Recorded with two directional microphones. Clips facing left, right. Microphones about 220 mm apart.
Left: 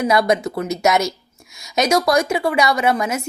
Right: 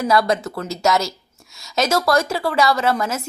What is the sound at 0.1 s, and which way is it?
Speech, 20° left (ahead or behind).